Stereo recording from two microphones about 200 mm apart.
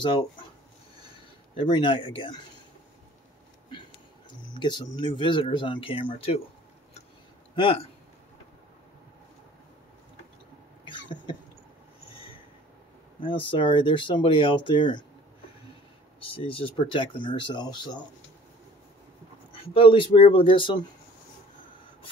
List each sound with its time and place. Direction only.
0.0 s speech: 25° left (ahead or behind)
1.6 s speech: 25° left (ahead or behind)
4.6 s speech: 20° left (ahead or behind)
10.9 s a sound: 20° left (ahead or behind)
13.2 s speech: 25° left (ahead or behind)
16.2 s speech: 25° left (ahead or behind)
19.7 s speech: 25° left (ahead or behind)